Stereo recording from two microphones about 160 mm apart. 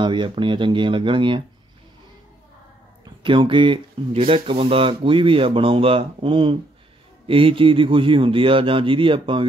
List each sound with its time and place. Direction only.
0.0 s speech: 30° right (ahead or behind)
3.3 s speech: 30° right (ahead or behind)